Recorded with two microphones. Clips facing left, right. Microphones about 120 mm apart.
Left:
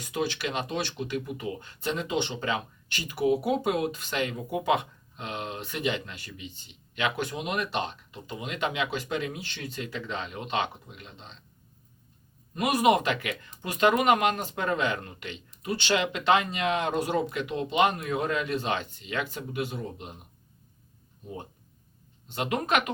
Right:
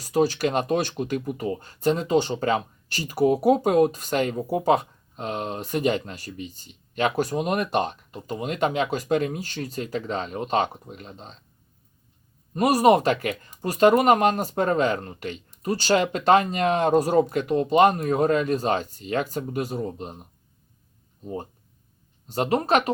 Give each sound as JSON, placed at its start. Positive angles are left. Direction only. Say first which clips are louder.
{"t": 0.0, "sound": "speech", "louder": "right 9 dB", "side_deg": -40}
{"t": 12.5, "sound": "speech", "louder": "right 5 dB", "side_deg": -40}
{"t": 22.3, "sound": "speech", "louder": "right 6 dB", "side_deg": -35}